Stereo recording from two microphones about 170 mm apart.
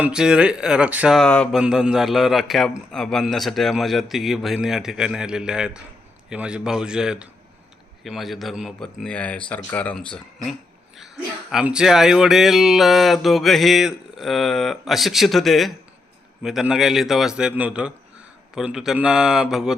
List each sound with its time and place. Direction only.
0.0 s a man's voice: 5° right (ahead or behind)
11.5 s a man's voice: 5° right (ahead or behind)